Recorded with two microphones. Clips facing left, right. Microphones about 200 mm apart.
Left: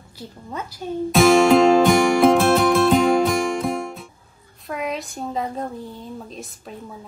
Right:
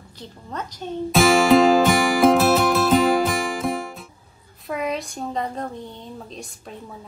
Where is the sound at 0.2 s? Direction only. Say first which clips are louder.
Left 1 dB; 10° left (ahead or behind).